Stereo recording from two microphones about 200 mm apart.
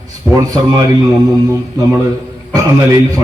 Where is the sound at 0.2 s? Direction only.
5° right (ahead or behind).